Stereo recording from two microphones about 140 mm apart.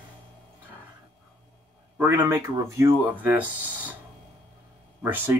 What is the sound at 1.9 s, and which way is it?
Speech, 15° right (ahead or behind).